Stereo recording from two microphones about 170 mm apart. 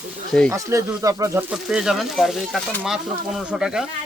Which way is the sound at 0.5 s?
20° right (ahead or behind).